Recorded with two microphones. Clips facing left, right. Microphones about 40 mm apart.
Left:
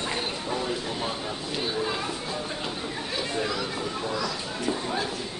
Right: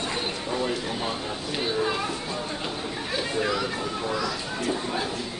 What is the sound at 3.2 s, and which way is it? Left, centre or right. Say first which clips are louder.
Chatter: right 3 dB; centre.